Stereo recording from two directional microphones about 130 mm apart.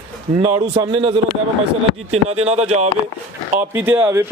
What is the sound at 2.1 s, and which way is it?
Speech, 55° right (ahead or behind).